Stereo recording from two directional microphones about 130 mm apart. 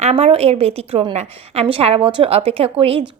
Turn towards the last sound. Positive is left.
turn(degrees=-50)  # may be behind; listen again after turning